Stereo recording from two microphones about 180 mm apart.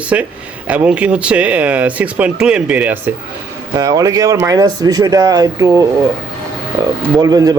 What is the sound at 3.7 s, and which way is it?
A man's voice, 20° right (ahead or behind).